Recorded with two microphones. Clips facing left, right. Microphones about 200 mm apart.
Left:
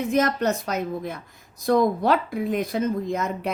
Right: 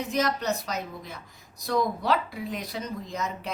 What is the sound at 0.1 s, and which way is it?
Speech, 55° left (ahead or behind).